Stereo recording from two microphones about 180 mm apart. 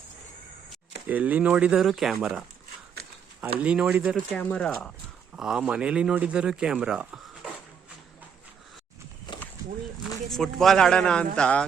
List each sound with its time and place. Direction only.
1.0 s speech: 10° right (ahead or behind)
3.6 s speech: 5° right (ahead or behind)
4.4 s speech: 10° left (ahead or behind)
5.4 s speech: 5° right (ahead or behind)
9.3 s a sound: 25° left (ahead or behind)
10.2 s speech: centre (ahead or behind)